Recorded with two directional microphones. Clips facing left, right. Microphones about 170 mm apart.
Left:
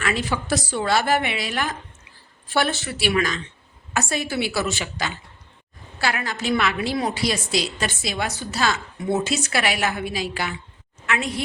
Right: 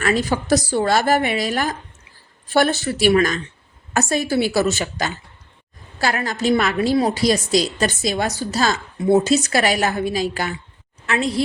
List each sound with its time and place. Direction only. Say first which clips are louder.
0.0 s a woman's voice: right 5 dB; 40° right (ahead or behind)
11.0 s a woman's voice: right 5 dB; 35° right (ahead or behind)